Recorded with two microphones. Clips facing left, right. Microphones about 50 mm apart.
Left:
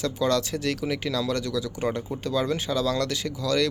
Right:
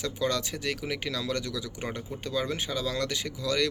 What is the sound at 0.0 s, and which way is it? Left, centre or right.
Speech, centre.